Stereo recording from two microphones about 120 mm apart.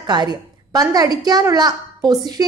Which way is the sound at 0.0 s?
35° right (ahead or behind).